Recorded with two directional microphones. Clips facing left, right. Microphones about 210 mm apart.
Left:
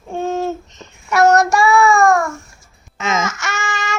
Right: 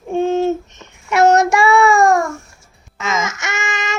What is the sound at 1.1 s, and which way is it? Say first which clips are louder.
Child singing: right 1 dB; 25° right (ahead or behind).